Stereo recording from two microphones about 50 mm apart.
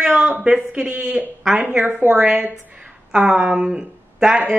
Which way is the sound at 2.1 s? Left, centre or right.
Centre.